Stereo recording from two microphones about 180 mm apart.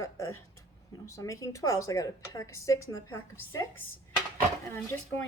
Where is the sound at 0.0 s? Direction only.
15° left (ahead or behind).